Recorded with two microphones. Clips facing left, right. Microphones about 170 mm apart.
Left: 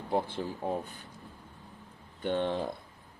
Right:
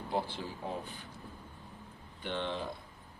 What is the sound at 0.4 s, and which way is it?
Speech, 45° left (ahead or behind).